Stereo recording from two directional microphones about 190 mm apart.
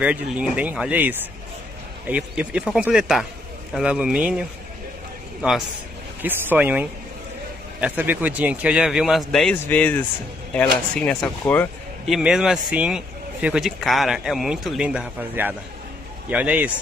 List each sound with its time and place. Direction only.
0.0 s speech: 5° right (ahead or behind)
6.2 s speech: 10° right (ahead or behind); by 11.7 s 10° left (ahead or behind)
12.1 s speech: 5° right (ahead or behind)